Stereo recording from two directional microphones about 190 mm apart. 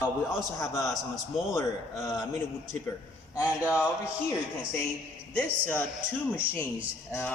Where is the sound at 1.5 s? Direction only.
15° left (ahead or behind).